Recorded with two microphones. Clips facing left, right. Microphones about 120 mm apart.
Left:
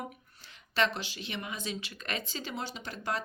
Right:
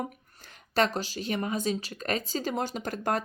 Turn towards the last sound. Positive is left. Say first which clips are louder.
# right 6 dB
turn(degrees=-50)  # may be behind; listen again after turning